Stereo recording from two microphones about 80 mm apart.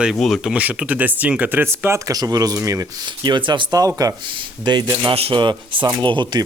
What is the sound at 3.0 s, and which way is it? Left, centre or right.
Speech, right.